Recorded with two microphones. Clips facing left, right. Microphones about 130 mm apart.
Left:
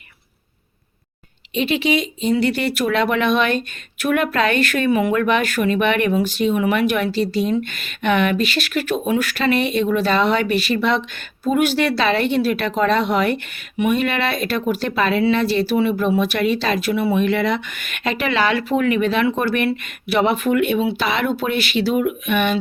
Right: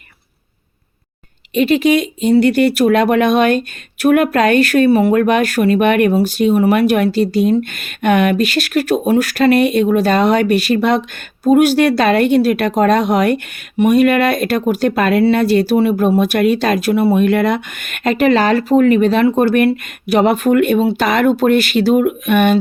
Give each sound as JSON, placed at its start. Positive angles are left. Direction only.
{"t": 1.5, "sound": "speech", "side_deg": -45}